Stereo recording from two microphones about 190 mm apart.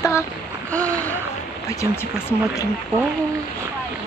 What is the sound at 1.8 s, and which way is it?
Speech, 15° left (ahead or behind).